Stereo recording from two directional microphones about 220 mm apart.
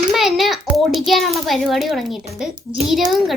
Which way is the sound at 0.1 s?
Centre (ahead or behind).